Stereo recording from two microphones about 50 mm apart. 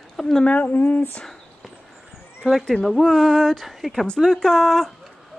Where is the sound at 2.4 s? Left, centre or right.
Centre.